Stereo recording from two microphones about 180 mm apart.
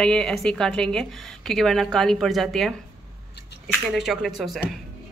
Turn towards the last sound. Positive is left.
turn(degrees=0)  # may be behind; listen again after turning